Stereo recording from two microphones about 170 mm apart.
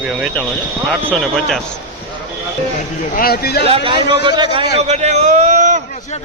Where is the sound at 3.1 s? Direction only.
60° left (ahead or behind).